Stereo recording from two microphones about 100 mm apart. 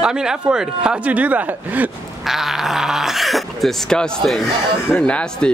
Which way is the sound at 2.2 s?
5° right (ahead or behind).